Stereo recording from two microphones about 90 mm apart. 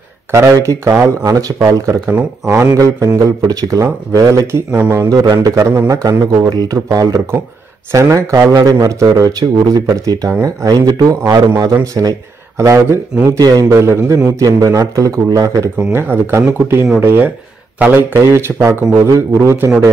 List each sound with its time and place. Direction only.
0.3 s speech: 35° right (ahead or behind)
3.3 s a man's voice: 40° right (ahead or behind)
5.1 s a man's voice: 60° right (ahead or behind)
5.4 s a man's voice: 40° right (ahead or behind)
15.9 s a man's voice: 25° right (ahead or behind)